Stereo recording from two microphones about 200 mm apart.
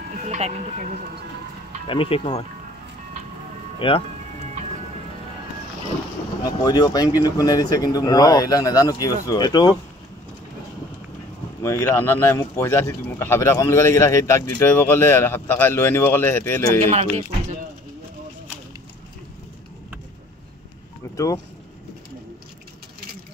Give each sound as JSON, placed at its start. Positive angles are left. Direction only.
{"t": 1.9, "sound": "speech", "side_deg": 25}
{"t": 3.8, "sound": "speech", "side_deg": 25}
{"t": 6.4, "sound": "speech", "side_deg": 20}
{"t": 11.6, "sound": "speech", "side_deg": 10}
{"t": 16.9, "sound": "speech", "side_deg": -30}